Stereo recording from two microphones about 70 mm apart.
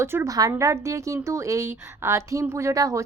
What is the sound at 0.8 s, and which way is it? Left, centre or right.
A woman's voice, right.